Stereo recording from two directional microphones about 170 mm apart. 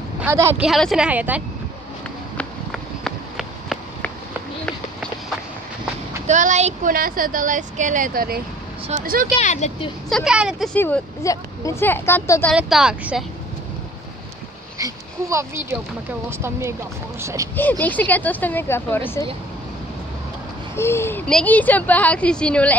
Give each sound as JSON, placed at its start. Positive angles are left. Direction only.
{"t": 0.2, "sound": "speech", "side_deg": -15}
{"t": 0.6, "sound": "a woman's voice", "side_deg": 0}
{"t": 2.3, "sound": "run", "side_deg": 0}
{"t": 6.2, "sound": "speech", "side_deg": -45}
{"t": 9.4, "sound": "speech", "side_deg": 45}
{"t": 10.0, "sound": "a woman's voice", "side_deg": 0}
{"t": 10.7, "sound": "speech", "side_deg": 10}
{"t": 12.5, "sound": "a woman's voice", "side_deg": -5}
{"t": 14.8, "sound": "speech", "side_deg": -15}
{"t": 17.6, "sound": "speech", "side_deg": 10}
{"t": 20.7, "sound": "speech", "side_deg": 15}